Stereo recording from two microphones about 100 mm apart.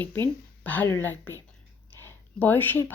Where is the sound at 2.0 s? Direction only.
20° left (ahead or behind).